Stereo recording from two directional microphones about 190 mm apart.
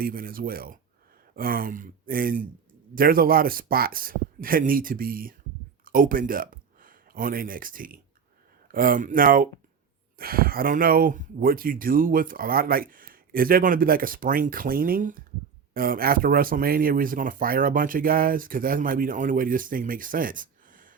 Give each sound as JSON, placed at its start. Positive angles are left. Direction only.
{"t": 0.0, "sound": "speech", "side_deg": -50}